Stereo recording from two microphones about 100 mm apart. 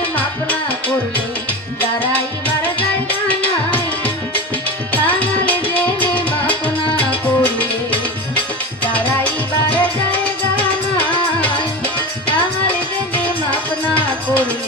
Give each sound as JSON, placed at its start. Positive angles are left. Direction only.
{"t": 0.1, "sound": "music", "side_deg": 15}
{"t": 8.9, "sound": "salsa music", "side_deg": 15}
{"t": 13.1, "sound": "music", "side_deg": 15}